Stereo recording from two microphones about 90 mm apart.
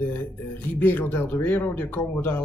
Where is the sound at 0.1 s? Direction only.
20° left (ahead or behind).